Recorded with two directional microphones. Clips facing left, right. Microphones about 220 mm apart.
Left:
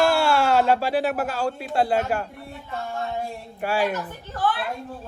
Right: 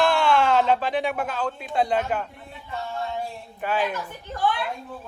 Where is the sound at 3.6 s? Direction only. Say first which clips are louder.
Left 2 dB; 10° left (ahead or behind).